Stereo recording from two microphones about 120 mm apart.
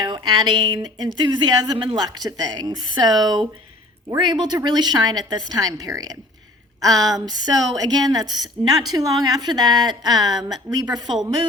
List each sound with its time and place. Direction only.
0.0 s a woman's voice: 40° right (ahead or behind)